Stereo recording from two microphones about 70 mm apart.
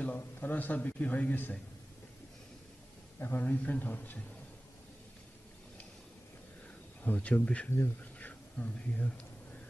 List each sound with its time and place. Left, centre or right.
0.0 s speech: left
3.2 s speech: left
7.0 s speech: left